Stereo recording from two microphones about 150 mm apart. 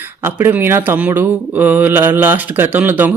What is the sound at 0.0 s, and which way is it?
Speech, 15° right (ahead or behind).